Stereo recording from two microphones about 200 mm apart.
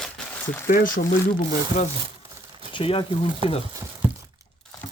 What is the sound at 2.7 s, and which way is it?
Speech, 25° left (ahead or behind).